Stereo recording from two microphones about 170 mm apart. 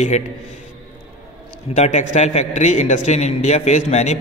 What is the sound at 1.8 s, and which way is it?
A man's voice, 45° left (ahead or behind).